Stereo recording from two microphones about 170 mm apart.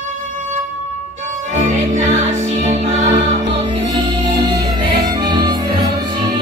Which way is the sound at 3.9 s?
20° right (ahead or behind).